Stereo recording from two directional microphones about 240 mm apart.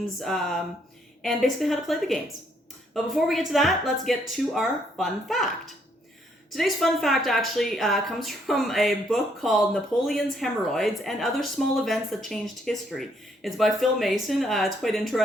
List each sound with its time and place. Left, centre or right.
0.2 s speech: centre